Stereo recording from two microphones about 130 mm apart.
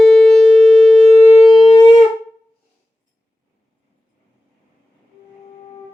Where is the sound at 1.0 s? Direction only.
55° left (ahead or behind).